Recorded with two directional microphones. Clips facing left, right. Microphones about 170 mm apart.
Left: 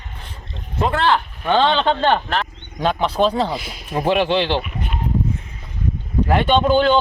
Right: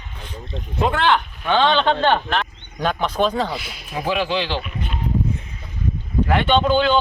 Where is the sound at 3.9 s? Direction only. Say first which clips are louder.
Left 4 dB; 60° left (ahead or behind).